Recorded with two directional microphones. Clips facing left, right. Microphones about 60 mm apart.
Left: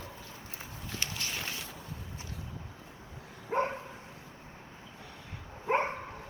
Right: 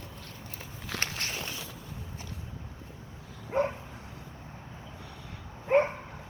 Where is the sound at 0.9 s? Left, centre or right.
Right.